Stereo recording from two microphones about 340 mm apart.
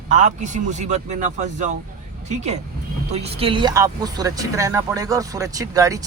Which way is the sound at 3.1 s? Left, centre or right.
Centre.